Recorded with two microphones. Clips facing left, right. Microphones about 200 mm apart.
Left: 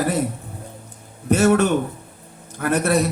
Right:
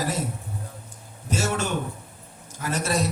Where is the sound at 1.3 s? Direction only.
60° left (ahead or behind).